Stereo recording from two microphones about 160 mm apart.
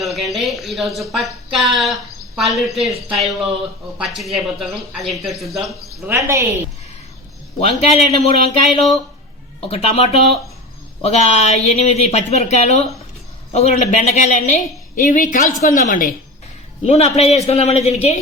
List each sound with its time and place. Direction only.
0.0 s speech: centre (ahead or behind)
6.1 s a woman's voice: 15° right (ahead or behind)
7.6 s a man's voice: 40° left (ahead or behind)
16.8 s a man's voice: 40° left (ahead or behind)